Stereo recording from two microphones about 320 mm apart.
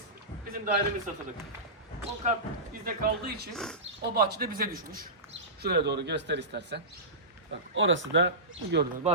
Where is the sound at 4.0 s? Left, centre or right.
Right.